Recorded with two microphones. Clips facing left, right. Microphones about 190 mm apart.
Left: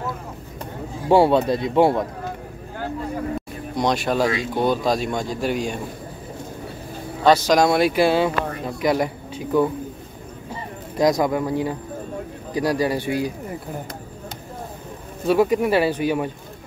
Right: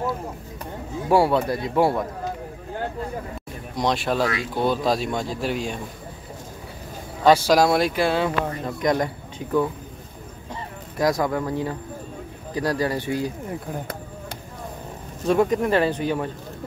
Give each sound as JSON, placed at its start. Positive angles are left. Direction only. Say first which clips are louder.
{"t": 1.0, "sound": "a man's voice", "louder": "left 3 dB", "side_deg": 25}
{"t": 3.7, "sound": "speech", "louder": "left 2 dB", "side_deg": 0}
{"t": 7.2, "sound": "speech", "louder": "even", "side_deg": -10}
{"t": 7.9, "sound": "speech", "louder": "left 4 dB", "side_deg": 10}
{"t": 11.0, "sound": "speech", "louder": "left 3 dB", "side_deg": 15}
{"t": 15.2, "sound": "speech", "louder": "left 2 dB", "side_deg": 5}